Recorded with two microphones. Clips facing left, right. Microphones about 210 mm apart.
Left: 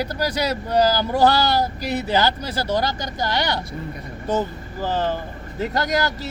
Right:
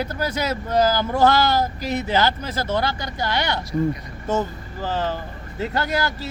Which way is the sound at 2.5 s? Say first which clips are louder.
Left 1 dB; 35° left (ahead or behind).